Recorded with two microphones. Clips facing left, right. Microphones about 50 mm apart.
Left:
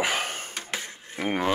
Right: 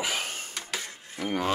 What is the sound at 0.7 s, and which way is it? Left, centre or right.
Dishes, left.